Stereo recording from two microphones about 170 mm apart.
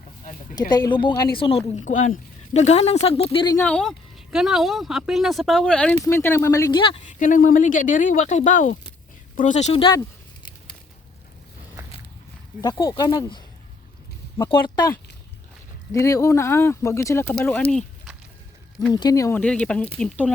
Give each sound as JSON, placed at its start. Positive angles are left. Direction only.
{"t": 0.7, "sound": "speech", "side_deg": 25}
{"t": 1.8, "sound": "speech", "side_deg": 45}
{"t": 3.6, "sound": "speech", "side_deg": 5}
{"t": 6.7, "sound": "speech", "side_deg": 30}
{"t": 7.1, "sound": "speech", "side_deg": 50}
{"t": 12.6, "sound": "speech", "side_deg": 25}
{"t": 14.5, "sound": "speech", "side_deg": 25}
{"t": 18.9, "sound": "speech", "side_deg": 20}
{"t": 19.4, "sound": "speech", "side_deg": 5}